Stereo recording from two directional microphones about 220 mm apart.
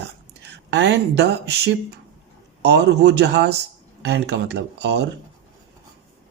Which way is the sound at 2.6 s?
50° right (ahead or behind).